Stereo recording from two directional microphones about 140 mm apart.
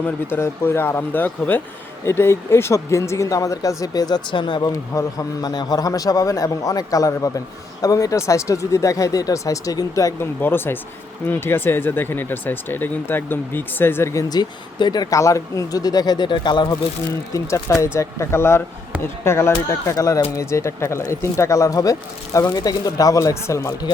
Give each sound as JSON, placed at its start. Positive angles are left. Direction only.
{"t": 0.0, "sound": "speech", "side_deg": 15}
{"t": 17.3, "sound": "speech", "side_deg": 20}